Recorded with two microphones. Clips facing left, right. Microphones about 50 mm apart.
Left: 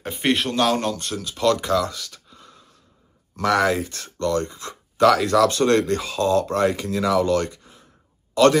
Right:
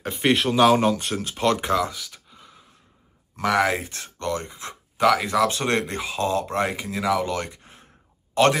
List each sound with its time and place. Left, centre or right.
0.0 s speech: centre
1.1 s speech: right
1.9 s a sound: centre
3.3 s speech: centre
3.7 s speech: right
7.6 s a sound: right
8.4 s speech: right